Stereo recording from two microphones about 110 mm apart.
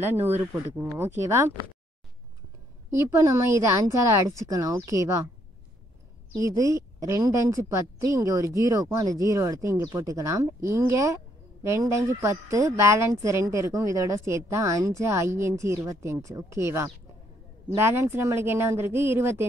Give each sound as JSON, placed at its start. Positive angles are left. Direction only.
{"t": 0.3, "sound": "speech", "side_deg": -20}
{"t": 3.0, "sound": "speech", "side_deg": -25}
{"t": 6.3, "sound": "speech", "side_deg": -30}